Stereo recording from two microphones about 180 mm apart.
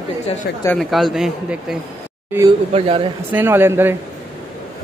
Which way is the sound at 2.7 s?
35° right (ahead or behind).